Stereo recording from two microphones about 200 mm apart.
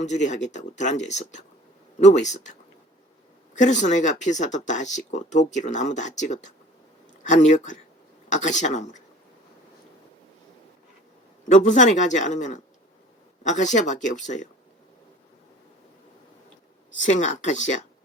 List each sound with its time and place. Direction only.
0.0 s speech: 35° left (ahead or behind)
3.6 s speech: 35° left (ahead or behind)
11.5 s speech: 40° left (ahead or behind)
17.0 s speech: 35° left (ahead or behind)